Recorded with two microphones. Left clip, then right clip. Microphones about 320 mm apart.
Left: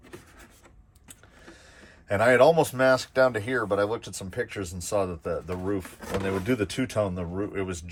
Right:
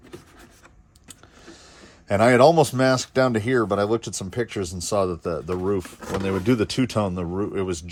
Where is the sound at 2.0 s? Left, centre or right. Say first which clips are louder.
Right 3 dB; centre.